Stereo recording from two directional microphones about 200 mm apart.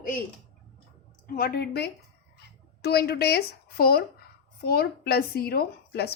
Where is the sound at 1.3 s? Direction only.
50° left (ahead or behind).